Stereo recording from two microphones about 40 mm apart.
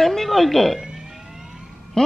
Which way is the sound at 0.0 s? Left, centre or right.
Centre.